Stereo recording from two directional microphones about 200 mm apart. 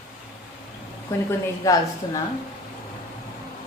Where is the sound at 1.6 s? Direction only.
15° left (ahead or behind).